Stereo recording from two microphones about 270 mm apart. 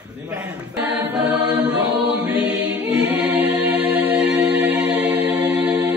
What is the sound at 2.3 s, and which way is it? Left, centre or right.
Choir, left.